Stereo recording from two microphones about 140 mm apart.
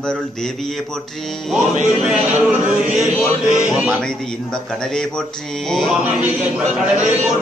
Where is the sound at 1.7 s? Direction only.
60° right (ahead or behind).